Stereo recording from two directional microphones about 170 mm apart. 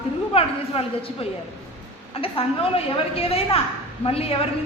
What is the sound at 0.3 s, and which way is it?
Speech, 35° left (ahead or behind).